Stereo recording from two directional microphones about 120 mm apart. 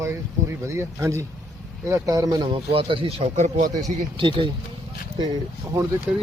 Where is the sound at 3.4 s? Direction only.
80° right.